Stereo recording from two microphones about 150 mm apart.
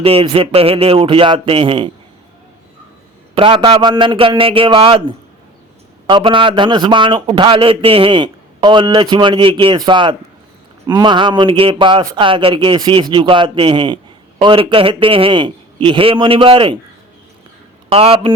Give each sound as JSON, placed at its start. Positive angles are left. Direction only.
{"t": 0.0, "sound": "a man's voice", "side_deg": -40}
{"t": 3.3, "sound": "a man's voice", "side_deg": -35}
{"t": 17.8, "sound": "a man's voice", "side_deg": -40}